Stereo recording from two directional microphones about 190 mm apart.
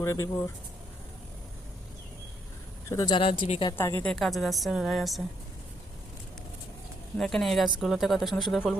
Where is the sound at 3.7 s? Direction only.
15° left (ahead or behind).